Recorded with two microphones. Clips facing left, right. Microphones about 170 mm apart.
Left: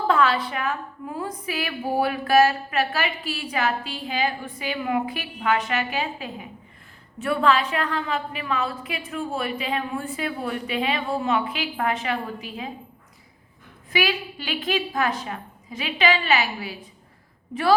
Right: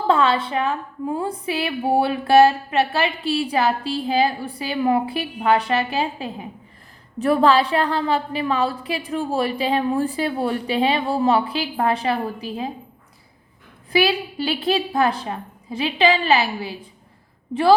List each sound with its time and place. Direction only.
0.1 s a woman's voice: 25° right (ahead or behind)
13.9 s a woman's voice: 35° right (ahead or behind)